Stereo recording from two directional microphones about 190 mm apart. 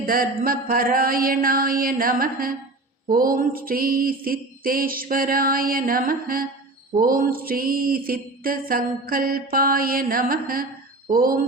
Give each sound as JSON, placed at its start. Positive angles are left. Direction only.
{"t": 0.0, "sound": "mantra", "side_deg": -50}